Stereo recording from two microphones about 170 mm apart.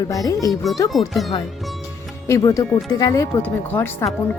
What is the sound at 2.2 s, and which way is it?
Speech, 20° left (ahead or behind).